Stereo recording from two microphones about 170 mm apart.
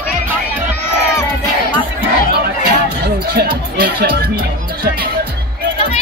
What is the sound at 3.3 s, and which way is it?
Music, 65° right (ahead or behind).